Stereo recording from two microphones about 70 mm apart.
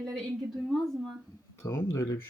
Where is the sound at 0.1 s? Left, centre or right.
Centre.